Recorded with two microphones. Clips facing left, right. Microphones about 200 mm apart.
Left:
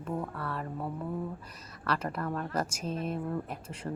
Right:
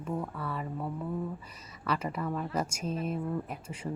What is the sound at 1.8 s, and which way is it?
Speech, 10° right (ahead or behind).